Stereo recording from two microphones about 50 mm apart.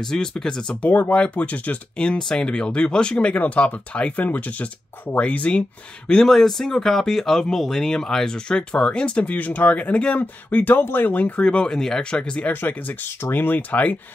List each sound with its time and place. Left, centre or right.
0.1 s speech: centre
0.8 s speech: left
6.0 s speech: centre; by 11.4 s left
11.4 s speech: centre
12.1 s speech: centre
12.5 s speech: left